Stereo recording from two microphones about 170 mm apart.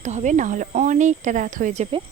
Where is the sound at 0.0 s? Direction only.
45° right (ahead or behind).